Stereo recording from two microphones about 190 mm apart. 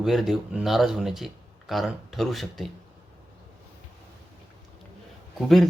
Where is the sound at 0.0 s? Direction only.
Centre (ahead or behind).